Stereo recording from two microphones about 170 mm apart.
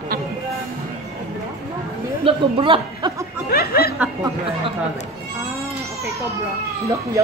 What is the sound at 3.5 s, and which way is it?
Speech, 65° left (ahead or behind).